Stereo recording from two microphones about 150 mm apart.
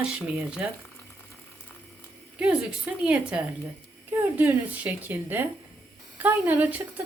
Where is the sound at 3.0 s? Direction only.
10° right (ahead or behind).